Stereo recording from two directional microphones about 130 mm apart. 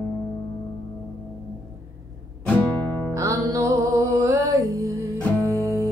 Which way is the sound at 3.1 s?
25° right (ahead or behind).